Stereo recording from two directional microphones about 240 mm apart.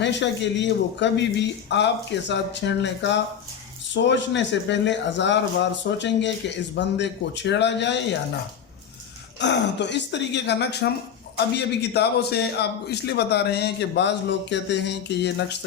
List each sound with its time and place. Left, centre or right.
0.0 s a man's voice: left
9.4 s a man's voice: left